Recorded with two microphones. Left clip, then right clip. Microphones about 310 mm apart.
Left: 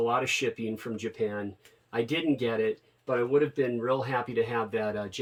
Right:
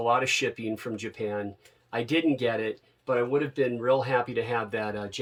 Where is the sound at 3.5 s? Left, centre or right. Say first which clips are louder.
Right 3 dB; centre.